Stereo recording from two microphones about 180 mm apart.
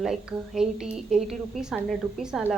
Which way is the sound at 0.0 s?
5° right (ahead or behind).